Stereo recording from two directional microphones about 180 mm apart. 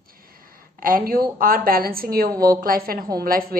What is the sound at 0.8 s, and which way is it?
A woman's voice, 55° right (ahead or behind).